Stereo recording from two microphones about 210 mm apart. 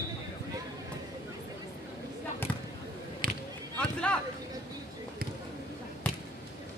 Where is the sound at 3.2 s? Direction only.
45° right (ahead or behind).